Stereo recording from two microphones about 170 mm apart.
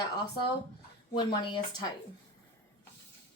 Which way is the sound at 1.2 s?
30° left (ahead or behind).